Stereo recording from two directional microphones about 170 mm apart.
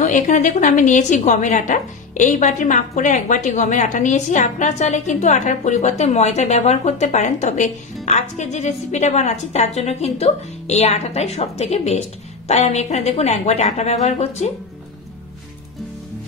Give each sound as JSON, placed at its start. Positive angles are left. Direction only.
{"t": 0.0, "sound": "a woman's voice", "side_deg": 45}